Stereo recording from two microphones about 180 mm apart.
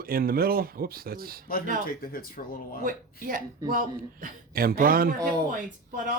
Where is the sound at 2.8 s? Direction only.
50° right (ahead or behind).